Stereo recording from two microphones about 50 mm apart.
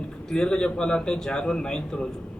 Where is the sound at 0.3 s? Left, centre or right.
Centre.